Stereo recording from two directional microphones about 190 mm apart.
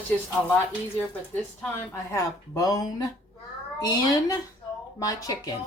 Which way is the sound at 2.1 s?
20° left (ahead or behind).